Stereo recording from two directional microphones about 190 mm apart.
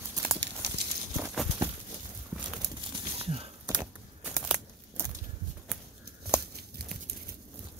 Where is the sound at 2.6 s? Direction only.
25° right (ahead or behind).